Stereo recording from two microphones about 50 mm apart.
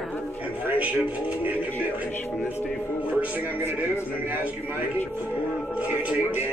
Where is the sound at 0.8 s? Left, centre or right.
Right.